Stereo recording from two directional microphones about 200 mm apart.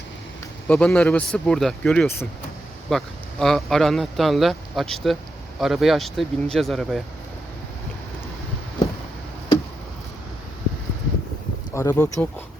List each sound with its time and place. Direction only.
0.7 s speech: 5° left (ahead or behind)
11.7 s speech: 15° left (ahead or behind)